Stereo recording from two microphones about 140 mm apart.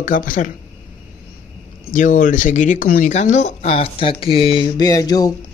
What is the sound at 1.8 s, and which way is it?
Speech, 70° left (ahead or behind).